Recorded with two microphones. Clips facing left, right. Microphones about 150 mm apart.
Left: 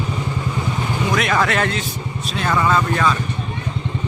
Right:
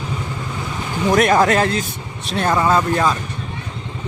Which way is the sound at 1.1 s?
40° right (ahead or behind).